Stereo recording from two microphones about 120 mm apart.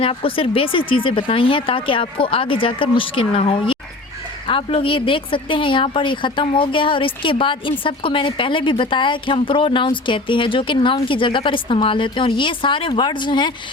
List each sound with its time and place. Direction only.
0.0 s speech: 50° left (ahead or behind)